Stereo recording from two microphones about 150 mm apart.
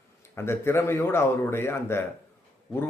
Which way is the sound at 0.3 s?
15° left (ahead or behind).